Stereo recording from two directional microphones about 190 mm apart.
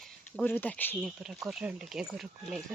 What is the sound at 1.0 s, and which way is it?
Speech, 5° right (ahead or behind).